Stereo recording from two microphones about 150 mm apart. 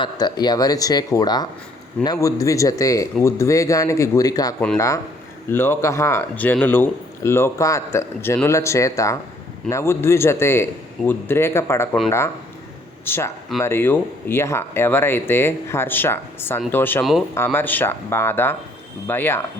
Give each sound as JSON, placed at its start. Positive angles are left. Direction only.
{"t": 0.0, "sound": "speech", "side_deg": 30}
{"t": 13.1, "sound": "speech", "side_deg": 15}
{"t": 17.0, "sound": "speech", "side_deg": 0}
{"t": 17.3, "sound": "speech", "side_deg": 15}